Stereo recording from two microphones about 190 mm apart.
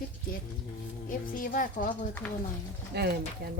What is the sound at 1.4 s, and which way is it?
Speech, 45° left (ahead or behind).